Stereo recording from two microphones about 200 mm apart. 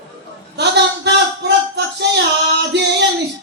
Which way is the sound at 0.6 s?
60° right (ahead or behind).